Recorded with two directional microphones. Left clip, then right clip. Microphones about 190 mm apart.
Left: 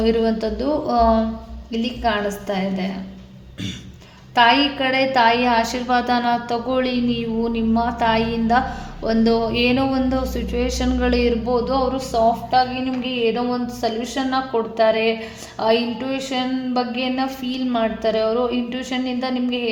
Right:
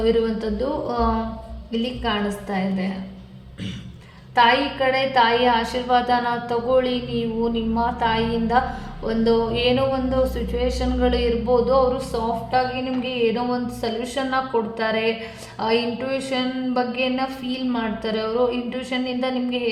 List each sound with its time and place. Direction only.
0.0 s a woman's voice: 40° left (ahead or behind)
4.4 s a woman's voice: 40° left (ahead or behind)